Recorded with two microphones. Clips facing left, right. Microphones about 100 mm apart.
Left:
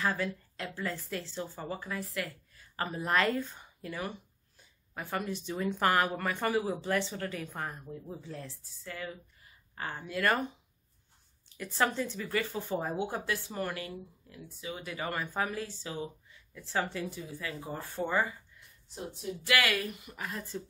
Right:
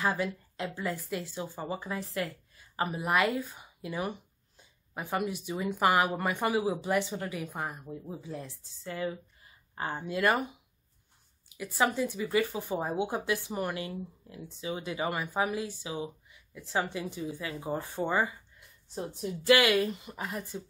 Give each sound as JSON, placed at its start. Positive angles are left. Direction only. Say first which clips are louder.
{"t": 0.0, "sound": "speech", "louder": "right 2 dB", "side_deg": -20}